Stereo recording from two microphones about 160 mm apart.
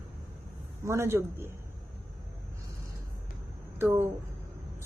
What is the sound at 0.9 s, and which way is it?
Speech, 15° right (ahead or behind).